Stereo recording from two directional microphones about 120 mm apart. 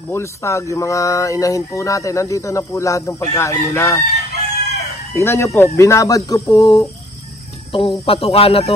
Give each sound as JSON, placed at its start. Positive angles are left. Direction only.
{"t": 0.1, "sound": "speech", "side_deg": 25}
{"t": 5.1, "sound": "speech", "side_deg": 25}
{"t": 7.7, "sound": "a man's voice", "side_deg": 50}